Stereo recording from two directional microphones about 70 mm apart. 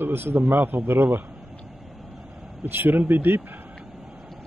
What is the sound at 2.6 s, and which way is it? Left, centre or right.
A man's voice, right.